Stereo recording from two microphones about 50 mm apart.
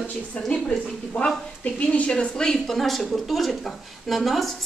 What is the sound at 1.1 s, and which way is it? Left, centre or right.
A woman's voice, left.